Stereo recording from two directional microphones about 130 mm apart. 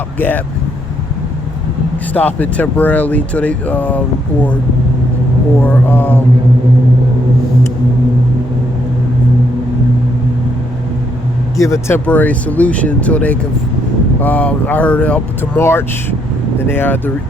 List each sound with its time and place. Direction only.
0.2 s speech: 15° left (ahead or behind)
2.1 s speech: 10° left (ahead or behind)
5.6 s speech: 15° left (ahead or behind)
11.5 s speech: 25° left (ahead or behind)